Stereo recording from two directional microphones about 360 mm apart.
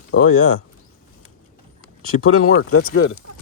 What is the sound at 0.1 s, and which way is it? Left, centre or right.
Speech, left.